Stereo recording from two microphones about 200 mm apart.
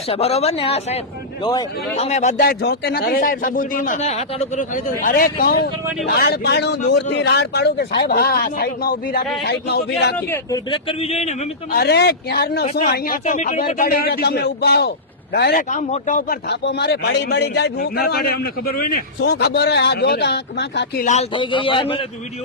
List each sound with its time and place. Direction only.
0.1 s speech: 30° left (ahead or behind)
2.0 s speech: 35° left (ahead or behind)
2.4 s a man's voice: 50° left (ahead or behind)
10.2 s a man's voice: 10° left (ahead or behind)
10.7 s speech: 30° left (ahead or behind)
11.7 s a man's voice: 55° left (ahead or behind)
12.9 s a man's voice: 45° left (ahead or behind)
15.7 s a man's voice: 40° left (ahead or behind); by 21.0 s 60° left (ahead or behind)
21.0 s speech: 35° left (ahead or behind)
21.3 s a man's voice: 25° left (ahead or behind)